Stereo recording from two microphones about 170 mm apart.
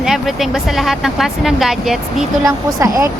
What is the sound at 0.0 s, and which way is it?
Speech, centre (ahead or behind).